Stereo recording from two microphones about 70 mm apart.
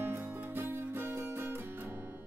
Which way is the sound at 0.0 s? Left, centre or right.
Right.